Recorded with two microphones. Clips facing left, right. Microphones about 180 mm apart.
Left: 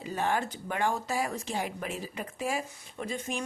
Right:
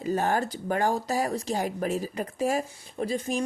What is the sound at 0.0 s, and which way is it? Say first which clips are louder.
Speech: right 5 dB; 40° right (ahead or behind).